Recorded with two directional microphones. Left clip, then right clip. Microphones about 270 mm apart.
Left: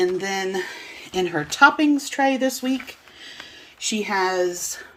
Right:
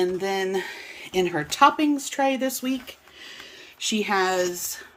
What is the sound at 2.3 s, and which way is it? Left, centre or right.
Speech, right.